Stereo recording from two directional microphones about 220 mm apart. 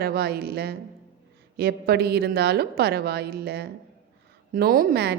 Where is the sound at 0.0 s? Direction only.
45° right (ahead or behind).